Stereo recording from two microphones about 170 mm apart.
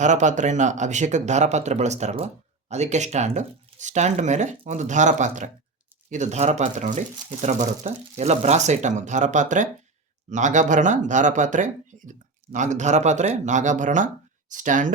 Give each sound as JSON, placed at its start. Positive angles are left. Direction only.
{"t": 0.0, "sound": "speech", "side_deg": -45}